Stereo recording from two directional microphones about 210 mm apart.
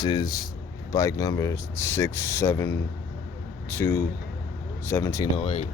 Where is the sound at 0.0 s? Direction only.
20° left (ahead or behind).